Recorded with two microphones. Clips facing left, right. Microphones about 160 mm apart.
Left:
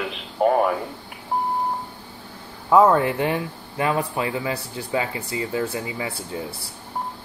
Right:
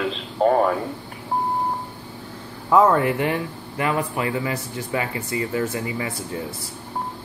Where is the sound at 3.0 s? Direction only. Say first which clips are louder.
Right 1 dB; 20° left (ahead or behind).